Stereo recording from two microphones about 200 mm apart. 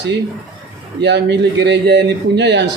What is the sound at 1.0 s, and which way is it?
Speech, 60° right (ahead or behind).